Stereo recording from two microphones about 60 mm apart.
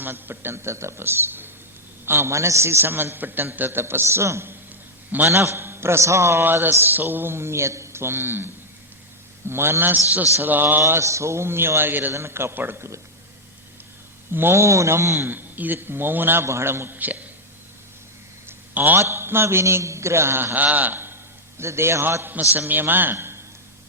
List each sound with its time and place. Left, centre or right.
0.0 s a man's voice: right
6.4 s a man's voice: right
9.5 s a man's voice: right
11.0 s a man's voice: right
12.1 s a man's voice: right
14.3 s a man's voice: right
15.3 s a man's voice: right
18.7 s a man's voice: right
18.9 s a man's voice: right
21.6 s a man's voice: right
22.2 s a man's voice: right